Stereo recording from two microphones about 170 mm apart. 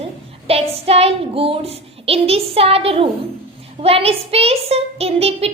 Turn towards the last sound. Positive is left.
turn(degrees=-35)  # may be behind; listen again after turning